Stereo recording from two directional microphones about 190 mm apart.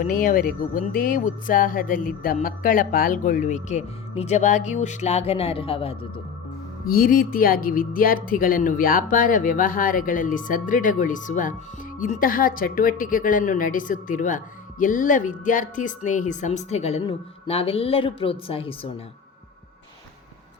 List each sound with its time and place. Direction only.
0.0 s speech: 45° left (ahead or behind); by 6.2 s 30° left (ahead or behind)
6.8 s speech: 50° left (ahead or behind); by 18.9 s 30° left (ahead or behind)